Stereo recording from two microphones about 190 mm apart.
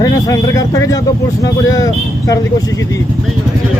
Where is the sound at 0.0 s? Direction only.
20° left (ahead or behind).